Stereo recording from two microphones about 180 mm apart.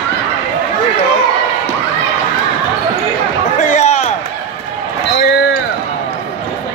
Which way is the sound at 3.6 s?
40° left (ahead or behind).